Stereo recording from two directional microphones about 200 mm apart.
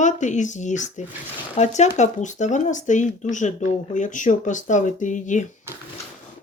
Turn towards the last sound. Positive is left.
turn(degrees=40)  # may be behind; listen again after turning